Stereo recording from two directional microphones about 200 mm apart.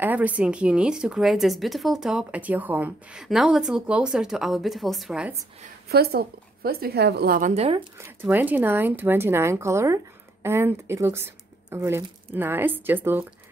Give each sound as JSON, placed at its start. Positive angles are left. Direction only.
{"t": 0.0, "sound": "a woman's voice", "side_deg": -10}
{"t": 5.9, "sound": "a woman's voice", "side_deg": -50}
{"t": 8.3, "sound": "speech", "side_deg": -10}